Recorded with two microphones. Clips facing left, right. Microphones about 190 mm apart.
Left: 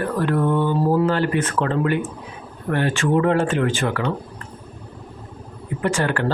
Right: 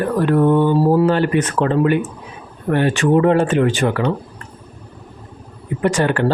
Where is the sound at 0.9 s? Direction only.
15° right (ahead or behind).